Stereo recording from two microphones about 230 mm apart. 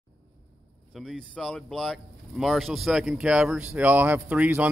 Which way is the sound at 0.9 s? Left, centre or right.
Centre.